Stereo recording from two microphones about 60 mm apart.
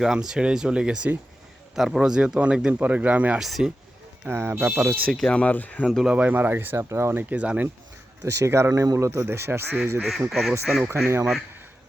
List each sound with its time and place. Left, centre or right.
0.0 s speech: centre; by 3.3 s right
3.3 s speech: centre
4.3 s speech: right
5.2 s speech: left
5.8 s speech: centre
6.1 s speech: right
6.7 s speech: right
7.3 s speech: right
8.2 s speech: right
8.7 s speech: right
9.2 s speech: right
10.2 s speech: centre
10.8 s speech: right